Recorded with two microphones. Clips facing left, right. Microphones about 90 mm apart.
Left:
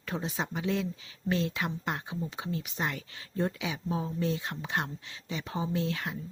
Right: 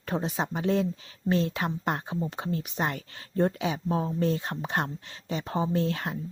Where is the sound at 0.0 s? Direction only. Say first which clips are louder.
Right 5 dB; 40° right (ahead or behind).